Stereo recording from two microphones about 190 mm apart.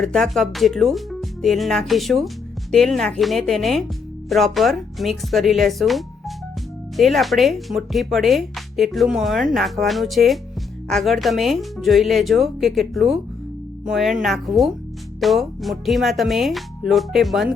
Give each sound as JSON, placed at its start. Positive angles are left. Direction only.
{"t": 0.0, "sound": "speech", "side_deg": 0}